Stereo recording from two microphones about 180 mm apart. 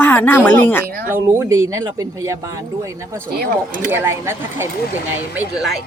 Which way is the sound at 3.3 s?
50° right (ahead or behind).